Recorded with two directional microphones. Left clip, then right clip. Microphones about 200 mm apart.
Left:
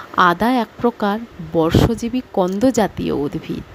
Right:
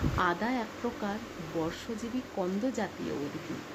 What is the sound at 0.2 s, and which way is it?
Speech, 55° left (ahead or behind).